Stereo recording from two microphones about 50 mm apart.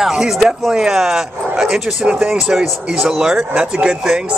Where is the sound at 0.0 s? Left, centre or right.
Centre.